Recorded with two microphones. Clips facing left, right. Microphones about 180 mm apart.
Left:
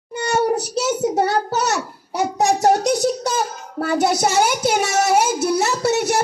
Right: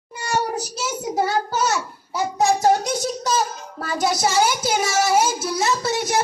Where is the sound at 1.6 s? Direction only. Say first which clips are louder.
Left 1 dB; 70° left (ahead or behind).